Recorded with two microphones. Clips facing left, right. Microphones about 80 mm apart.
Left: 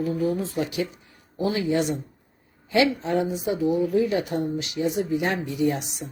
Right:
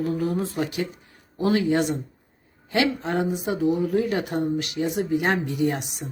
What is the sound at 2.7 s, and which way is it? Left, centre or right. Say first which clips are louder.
Speech: left 2 dB; right.